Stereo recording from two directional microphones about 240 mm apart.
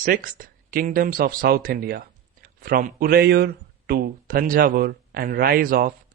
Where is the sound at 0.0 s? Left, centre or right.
Right.